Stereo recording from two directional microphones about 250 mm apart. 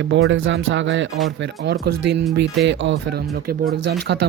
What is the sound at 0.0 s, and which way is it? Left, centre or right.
Speech, right.